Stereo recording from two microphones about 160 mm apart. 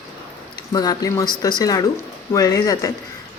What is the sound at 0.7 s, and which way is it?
Speech, 25° left (ahead or behind).